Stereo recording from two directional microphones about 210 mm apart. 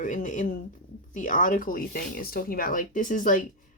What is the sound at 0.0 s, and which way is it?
Speech, 35° left (ahead or behind).